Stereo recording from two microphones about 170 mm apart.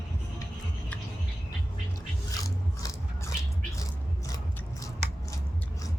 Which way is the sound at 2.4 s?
20° left (ahead or behind).